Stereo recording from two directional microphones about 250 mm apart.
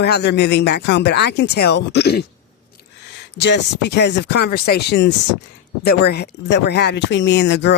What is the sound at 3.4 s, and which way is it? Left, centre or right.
Speech, left.